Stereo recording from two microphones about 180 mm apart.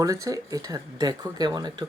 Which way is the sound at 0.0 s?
20° right (ahead or behind).